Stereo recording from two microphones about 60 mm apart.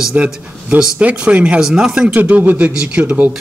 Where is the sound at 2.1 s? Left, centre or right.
Right.